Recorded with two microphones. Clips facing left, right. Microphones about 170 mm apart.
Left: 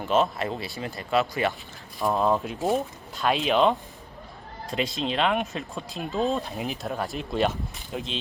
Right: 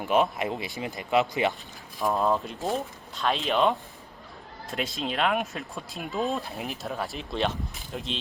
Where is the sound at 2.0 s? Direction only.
Centre (ahead or behind).